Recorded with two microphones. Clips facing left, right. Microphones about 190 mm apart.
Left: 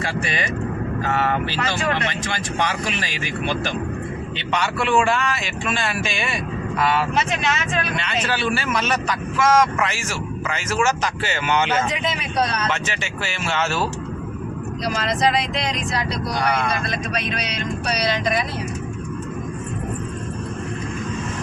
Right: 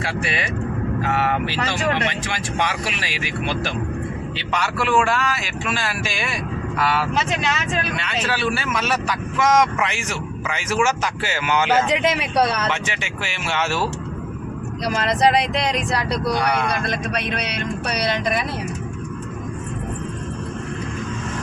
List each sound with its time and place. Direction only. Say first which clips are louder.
0.3 s speech: even; 5° right (ahead or behind)
4.5 s speech: even; 5° right (ahead or behind)
9.4 s speech: even; 15° right (ahead or behind)
11.9 s speech: right 5 dB; 75° right (ahead or behind)
12.7 s speech: even; 15° right (ahead or behind)
14.9 s speech: right 3 dB; 55° right (ahead or behind)
17.9 s speech: even; 55° right (ahead or behind)